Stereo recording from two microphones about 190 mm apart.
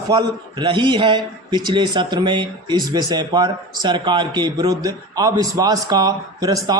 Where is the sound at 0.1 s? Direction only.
25° right (ahead or behind).